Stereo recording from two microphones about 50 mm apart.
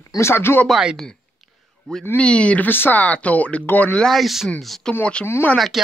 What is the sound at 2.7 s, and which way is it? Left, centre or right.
Speech, left.